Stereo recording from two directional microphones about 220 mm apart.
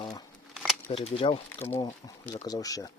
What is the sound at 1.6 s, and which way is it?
Speech, 15° left (ahead or behind).